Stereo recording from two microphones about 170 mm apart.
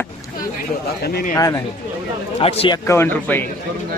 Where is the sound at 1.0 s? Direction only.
65° left (ahead or behind).